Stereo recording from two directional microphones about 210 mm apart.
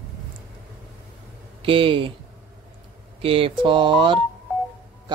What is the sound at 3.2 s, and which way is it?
Speech, 25° right (ahead or behind).